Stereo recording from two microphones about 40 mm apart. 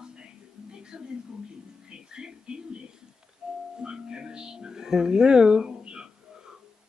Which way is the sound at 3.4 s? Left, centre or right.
Right.